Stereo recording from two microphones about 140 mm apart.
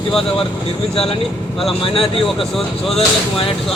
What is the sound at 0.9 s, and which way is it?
Speech, 45° left (ahead or behind).